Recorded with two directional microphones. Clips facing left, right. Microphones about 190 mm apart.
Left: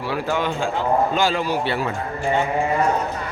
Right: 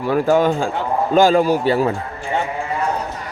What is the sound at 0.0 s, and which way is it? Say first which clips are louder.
A man's voice: right 8 dB; 45° right (ahead or behind).